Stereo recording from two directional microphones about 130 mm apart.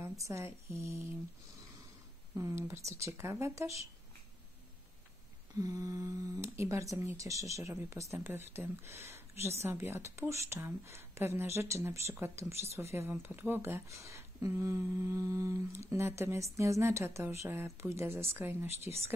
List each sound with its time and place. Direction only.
0.0 s speech: 20° right (ahead or behind)
2.3 s speech: 20° right (ahead or behind)
5.6 s speech: 25° right (ahead or behind)